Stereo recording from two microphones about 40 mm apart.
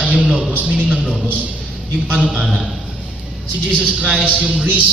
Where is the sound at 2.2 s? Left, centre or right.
Right.